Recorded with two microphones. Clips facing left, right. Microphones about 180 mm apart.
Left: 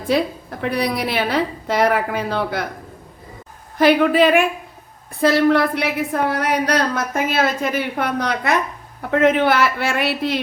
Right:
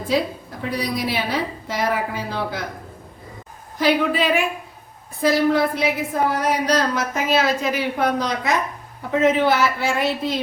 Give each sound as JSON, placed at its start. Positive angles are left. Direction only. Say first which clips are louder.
{"t": 0.6, "sound": "a woman's voice", "louder": "left 3 dB", "side_deg": 65}
{"t": 3.8, "sound": "a woman's voice", "louder": "left 5 dB", "side_deg": 60}
{"t": 5.2, "sound": "a woman's voice", "louder": "left 2 dB", "side_deg": 65}